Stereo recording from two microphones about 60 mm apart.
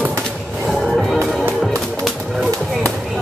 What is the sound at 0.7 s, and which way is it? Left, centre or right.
Music, centre.